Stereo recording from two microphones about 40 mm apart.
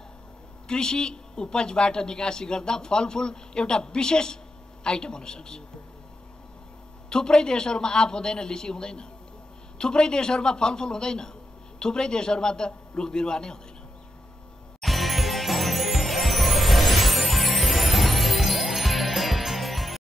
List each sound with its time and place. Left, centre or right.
0.7 s a man's voice: centre
7.1 s a man's voice: centre
14.8 s music: centre